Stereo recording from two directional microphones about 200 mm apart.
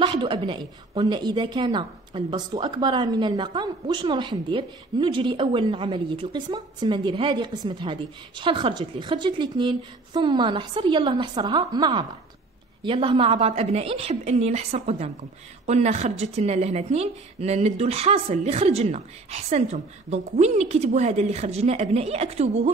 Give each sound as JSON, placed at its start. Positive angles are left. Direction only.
{"t": 0.0, "sound": "a woman's voice", "side_deg": -25}